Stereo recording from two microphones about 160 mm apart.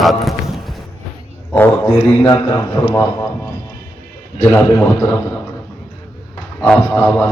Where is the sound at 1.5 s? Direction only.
10° left (ahead or behind).